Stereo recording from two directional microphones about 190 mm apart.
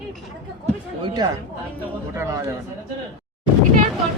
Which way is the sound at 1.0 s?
20° right (ahead or behind).